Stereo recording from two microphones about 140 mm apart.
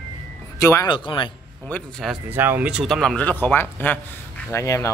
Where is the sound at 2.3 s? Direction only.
15° right (ahead or behind).